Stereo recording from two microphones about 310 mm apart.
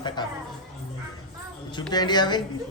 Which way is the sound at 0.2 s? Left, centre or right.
Centre.